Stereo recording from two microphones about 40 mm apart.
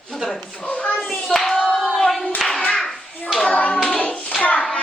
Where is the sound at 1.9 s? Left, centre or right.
Centre.